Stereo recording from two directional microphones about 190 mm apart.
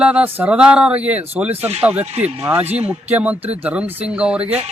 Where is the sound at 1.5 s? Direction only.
35° right (ahead or behind).